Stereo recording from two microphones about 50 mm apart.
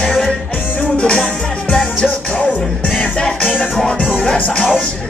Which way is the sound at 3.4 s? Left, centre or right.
Left.